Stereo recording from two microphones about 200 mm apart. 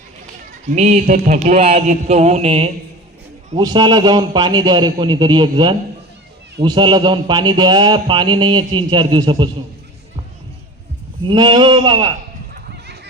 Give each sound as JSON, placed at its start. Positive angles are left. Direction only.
{"t": 0.7, "sound": "a man's voice", "side_deg": -35}
{"t": 11.2, "sound": "speech", "side_deg": -20}